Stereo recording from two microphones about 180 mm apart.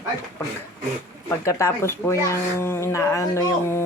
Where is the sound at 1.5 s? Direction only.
15° left (ahead or behind).